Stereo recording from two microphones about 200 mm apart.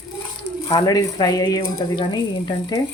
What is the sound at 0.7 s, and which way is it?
Speech, 15° left (ahead or behind).